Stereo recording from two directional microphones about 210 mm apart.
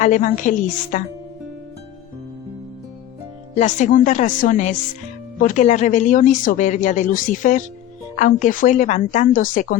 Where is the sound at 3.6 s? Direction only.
35° left (ahead or behind).